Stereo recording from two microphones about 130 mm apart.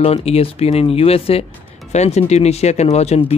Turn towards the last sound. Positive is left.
turn(degrees=55)  # may be behind; listen again after turning